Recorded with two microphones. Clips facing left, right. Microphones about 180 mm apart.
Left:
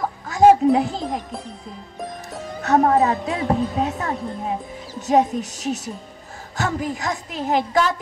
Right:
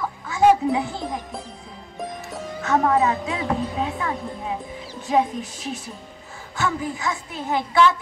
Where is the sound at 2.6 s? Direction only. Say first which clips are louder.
Left 3 dB; 40° left (ahead or behind).